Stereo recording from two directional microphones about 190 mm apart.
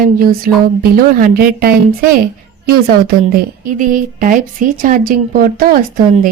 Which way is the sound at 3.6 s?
45° right (ahead or behind).